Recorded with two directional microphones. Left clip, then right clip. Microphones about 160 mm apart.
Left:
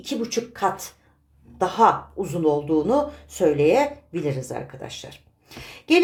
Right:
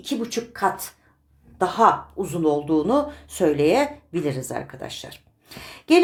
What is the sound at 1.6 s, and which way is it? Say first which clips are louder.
A woman's voice: even; 10° right (ahead or behind).